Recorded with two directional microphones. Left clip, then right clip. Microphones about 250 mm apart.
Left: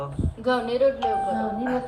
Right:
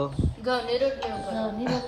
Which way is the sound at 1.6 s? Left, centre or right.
Right.